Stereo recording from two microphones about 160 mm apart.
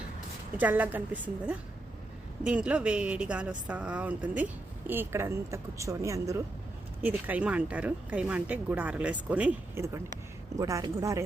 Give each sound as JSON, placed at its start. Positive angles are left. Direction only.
{"t": 0.5, "sound": "a woman's voice", "side_deg": -10}